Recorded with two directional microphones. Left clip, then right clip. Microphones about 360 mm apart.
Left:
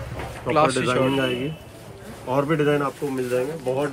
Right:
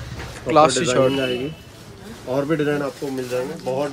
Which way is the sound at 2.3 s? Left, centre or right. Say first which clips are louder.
Even; centre.